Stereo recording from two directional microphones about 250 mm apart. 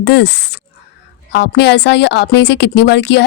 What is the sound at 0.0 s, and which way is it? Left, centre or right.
A woman's voice, left.